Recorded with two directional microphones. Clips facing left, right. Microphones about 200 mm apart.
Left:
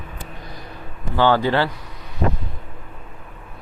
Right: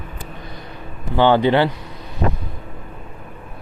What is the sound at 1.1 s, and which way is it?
Speech, 20° right (ahead or behind).